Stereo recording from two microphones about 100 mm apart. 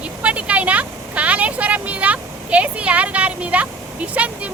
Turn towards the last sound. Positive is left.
turn(degrees=-15)  # may be behind; listen again after turning